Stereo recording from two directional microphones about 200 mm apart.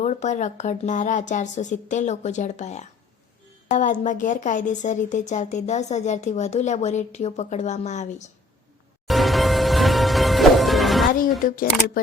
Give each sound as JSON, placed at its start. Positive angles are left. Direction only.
{"t": 0.0, "sound": "speech", "side_deg": 35}
{"t": 9.0, "sound": "music", "side_deg": 0}
{"t": 11.1, "sound": "speech", "side_deg": 45}